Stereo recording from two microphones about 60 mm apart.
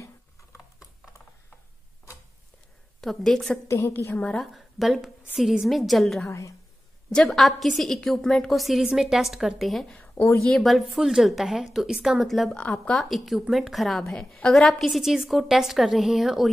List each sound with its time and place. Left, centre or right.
3.0 s a woman's voice: centre
3.6 s a woman's voice: left
3.9 s a woman's voice: left
4.4 s a woman's voice: centre
6.2 s a woman's voice: left
7.2 s a woman's voice: centre
10.2 s a woman's voice: left
10.6 s a woman's voice: centre